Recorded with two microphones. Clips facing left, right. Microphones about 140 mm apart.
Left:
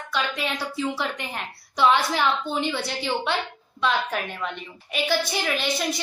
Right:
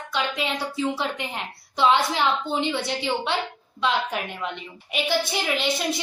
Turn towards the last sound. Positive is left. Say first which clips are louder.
# right 1 dB
turn(degrees=-20)  # may be behind; listen again after turning